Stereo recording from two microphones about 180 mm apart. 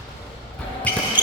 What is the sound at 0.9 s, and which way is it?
Basketball bounce, 10° left (ahead or behind).